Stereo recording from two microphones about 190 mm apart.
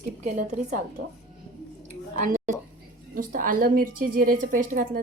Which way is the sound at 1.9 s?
40° right (ahead or behind).